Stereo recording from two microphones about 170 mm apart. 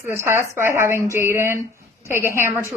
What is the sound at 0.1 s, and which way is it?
A woman's voice, 15° right (ahead or behind).